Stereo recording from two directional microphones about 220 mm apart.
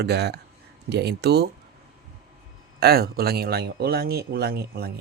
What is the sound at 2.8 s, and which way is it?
Speech, 45° right (ahead or behind).